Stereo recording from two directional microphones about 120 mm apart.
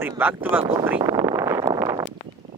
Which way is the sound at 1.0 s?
30° right (ahead or behind).